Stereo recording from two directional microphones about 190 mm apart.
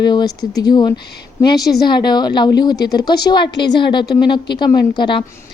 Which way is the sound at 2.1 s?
20° left (ahead or behind).